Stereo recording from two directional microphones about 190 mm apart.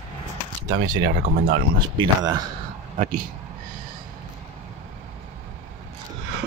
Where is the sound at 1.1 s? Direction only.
50° right (ahead or behind).